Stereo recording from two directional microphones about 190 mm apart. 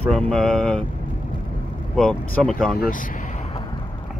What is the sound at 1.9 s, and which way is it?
Speech, 5° left (ahead or behind).